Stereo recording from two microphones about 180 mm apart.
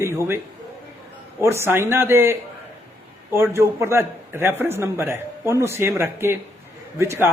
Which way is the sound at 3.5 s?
15° right (ahead or behind).